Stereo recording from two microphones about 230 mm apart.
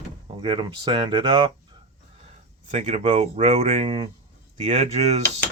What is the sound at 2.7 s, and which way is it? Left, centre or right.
Speech, right.